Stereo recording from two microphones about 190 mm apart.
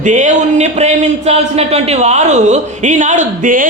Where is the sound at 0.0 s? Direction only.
40° right (ahead or behind).